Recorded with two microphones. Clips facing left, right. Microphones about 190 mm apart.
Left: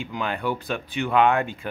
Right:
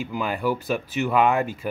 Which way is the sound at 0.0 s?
5° right (ahead or behind).